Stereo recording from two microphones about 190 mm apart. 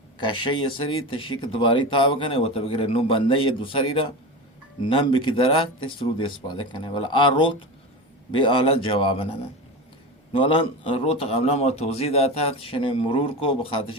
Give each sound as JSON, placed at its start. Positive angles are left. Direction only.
{"t": 0.2, "sound": "speech", "side_deg": 25}